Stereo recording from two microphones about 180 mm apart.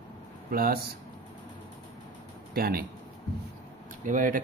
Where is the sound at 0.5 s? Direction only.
55° right (ahead or behind).